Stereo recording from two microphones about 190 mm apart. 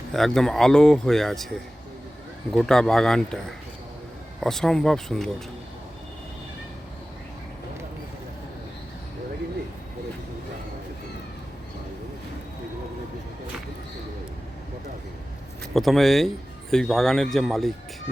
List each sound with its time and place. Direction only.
0.1 s speech: centre (ahead or behind)
15.7 s speech: centre (ahead or behind)